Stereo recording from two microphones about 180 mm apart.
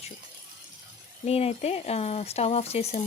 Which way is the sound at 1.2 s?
35° left (ahead or behind).